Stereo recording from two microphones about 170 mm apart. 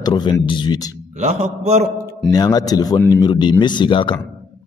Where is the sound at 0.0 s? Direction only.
25° left (ahead or behind).